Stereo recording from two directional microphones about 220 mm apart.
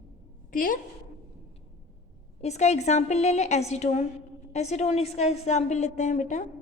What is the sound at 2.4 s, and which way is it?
A woman's voice, 30° left (ahead or behind).